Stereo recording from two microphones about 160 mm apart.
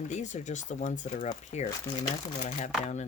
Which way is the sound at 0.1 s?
45° left (ahead or behind).